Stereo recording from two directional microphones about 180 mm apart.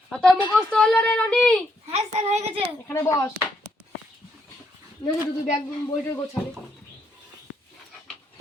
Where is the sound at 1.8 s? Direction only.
35° right (ahead or behind).